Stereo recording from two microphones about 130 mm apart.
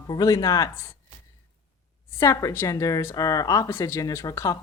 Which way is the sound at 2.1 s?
25° left (ahead or behind).